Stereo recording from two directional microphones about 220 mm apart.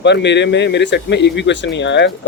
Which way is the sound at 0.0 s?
50° left (ahead or behind).